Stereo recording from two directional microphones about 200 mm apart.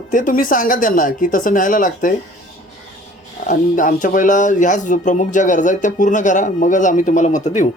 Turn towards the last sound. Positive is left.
turn(degrees=35)  # may be behind; listen again after turning